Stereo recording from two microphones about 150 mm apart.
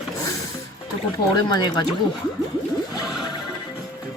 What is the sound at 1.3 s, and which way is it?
Speech, 30° left (ahead or behind).